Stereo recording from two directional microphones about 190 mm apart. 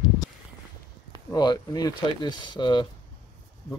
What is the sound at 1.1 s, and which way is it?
Speech, 20° left (ahead or behind).